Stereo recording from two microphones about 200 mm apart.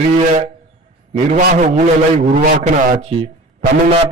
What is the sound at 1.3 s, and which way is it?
A man's voice, 45° right (ahead or behind).